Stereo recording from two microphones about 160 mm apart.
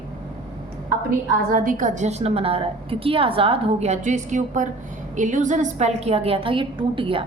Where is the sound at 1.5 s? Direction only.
60° right (ahead or behind); by 7.3 s 35° right (ahead or behind).